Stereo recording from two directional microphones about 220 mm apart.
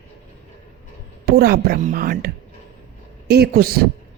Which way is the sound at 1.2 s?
45° right (ahead or behind).